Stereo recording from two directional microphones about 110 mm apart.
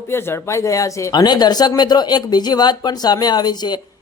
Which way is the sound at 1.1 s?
40° left (ahead or behind).